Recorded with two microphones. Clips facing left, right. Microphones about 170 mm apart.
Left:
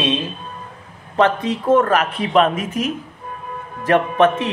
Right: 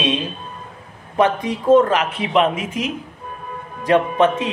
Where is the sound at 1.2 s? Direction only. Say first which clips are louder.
Left 1 dB; 15° right (ahead or behind).